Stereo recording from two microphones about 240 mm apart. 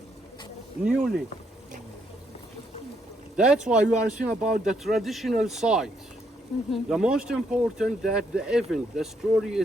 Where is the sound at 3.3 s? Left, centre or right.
Centre.